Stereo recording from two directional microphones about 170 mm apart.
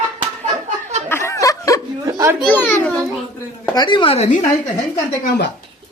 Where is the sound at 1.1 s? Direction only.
15° left (ahead or behind).